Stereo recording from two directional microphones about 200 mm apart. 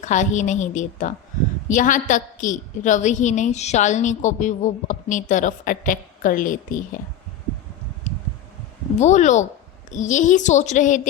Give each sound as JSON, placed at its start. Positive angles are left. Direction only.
{"t": 0.0, "sound": "a woman's voice", "side_deg": 40}
{"t": 8.1, "sound": "a sound", "side_deg": 35}
{"t": 9.0, "sound": "a woman's voice", "side_deg": 35}